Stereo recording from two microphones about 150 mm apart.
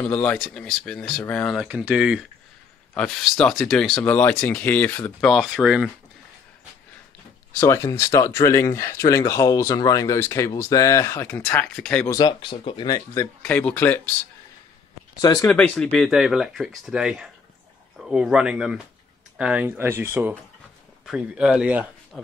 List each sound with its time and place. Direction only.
0.0 s speech: 10° left (ahead or behind); by 2.2 s 5° right (ahead or behind)
2.9 s speech: 5° left (ahead or behind)
5.3 s speech: centre (ahead or behind)
7.6 s speech: 20° left (ahead or behind)
12.1 s speech: 25° left (ahead or behind)
13.4 s speech: 10° left (ahead or behind)
15.1 s speech: 25° left (ahead or behind)
15.4 s speech: 10° left (ahead or behind); by 21.8 s 10° right (ahead or behind)
22.1 s speech: 5° left (ahead or behind)